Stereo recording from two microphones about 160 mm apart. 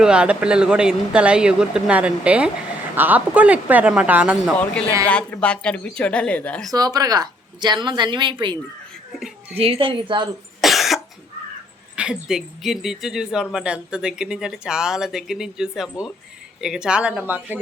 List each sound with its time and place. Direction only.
0.0 s speech: 5° right (ahead or behind)
5.0 s speech: 10° left (ahead or behind)
6.7 s a woman's voice: 25° right (ahead or behind)
9.6 s a child's voice: 35° right (ahead or behind)
10.6 s cough: centre (ahead or behind)
11.9 s speech: 5° right (ahead or behind)